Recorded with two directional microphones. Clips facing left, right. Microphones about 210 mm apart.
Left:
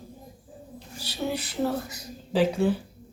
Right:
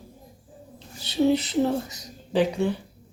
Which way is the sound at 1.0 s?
20° right (ahead or behind).